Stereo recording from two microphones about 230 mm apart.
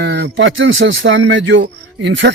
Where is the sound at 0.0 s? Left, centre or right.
Right.